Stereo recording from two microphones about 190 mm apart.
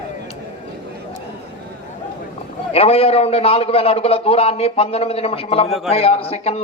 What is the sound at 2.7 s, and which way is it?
A man's voice, 30° left (ahead or behind).